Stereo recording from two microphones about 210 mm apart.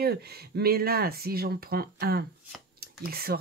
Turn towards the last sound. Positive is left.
turn(degrees=-45)  # may be behind; listen again after turning